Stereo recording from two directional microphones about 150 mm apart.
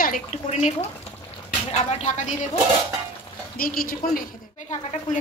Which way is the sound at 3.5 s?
75° left (ahead or behind).